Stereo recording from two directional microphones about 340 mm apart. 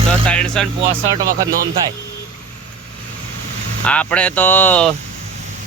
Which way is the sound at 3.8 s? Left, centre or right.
Centre.